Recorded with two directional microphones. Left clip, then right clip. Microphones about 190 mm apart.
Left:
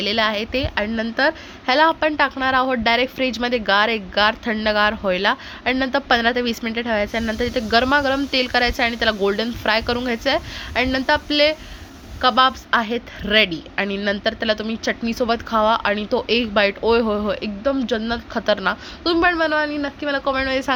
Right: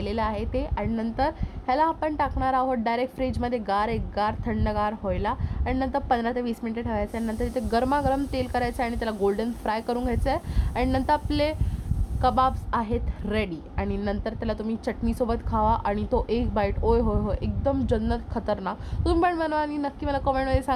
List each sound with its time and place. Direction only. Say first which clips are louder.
0.0 s a woman's voice: left 8 dB; 10° left (ahead or behind)
17.0 s speech: left 6 dB; 35° left (ahead or behind)
17.2 s speech: left 8 dB; 10° left (ahead or behind)
17.6 s a woman's voice: left 3 dB; 5° right (ahead or behind)
19.0 s a woman's voice: left 6 dB; centre (ahead or behind)